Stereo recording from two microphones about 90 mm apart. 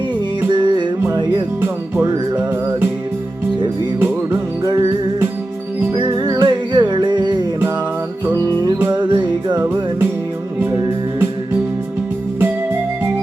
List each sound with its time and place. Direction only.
0.5 s music: 55° right (ahead or behind)
4.6 s music: 60° right (ahead or behind)
6.0 s music: 45° right (ahead or behind)
8.9 s music: 60° right (ahead or behind)